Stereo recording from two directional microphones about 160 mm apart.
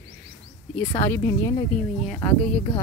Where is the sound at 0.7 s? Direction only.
15° left (ahead or behind).